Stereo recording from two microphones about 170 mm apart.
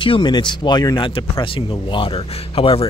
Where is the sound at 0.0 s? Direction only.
30° left (ahead or behind).